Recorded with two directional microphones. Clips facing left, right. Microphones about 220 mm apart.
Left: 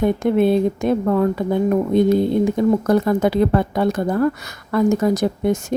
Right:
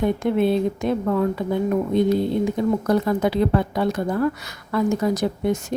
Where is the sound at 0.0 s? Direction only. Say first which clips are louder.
Left 3 dB; 50° left (ahead or behind).